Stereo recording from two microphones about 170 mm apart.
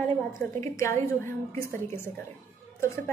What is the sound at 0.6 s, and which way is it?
A woman's voice, 15° left (ahead or behind).